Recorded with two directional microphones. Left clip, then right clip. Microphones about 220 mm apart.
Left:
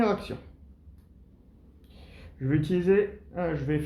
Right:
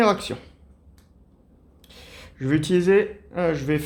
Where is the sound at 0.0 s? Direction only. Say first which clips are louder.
Right 7 dB; 45° right (ahead or behind).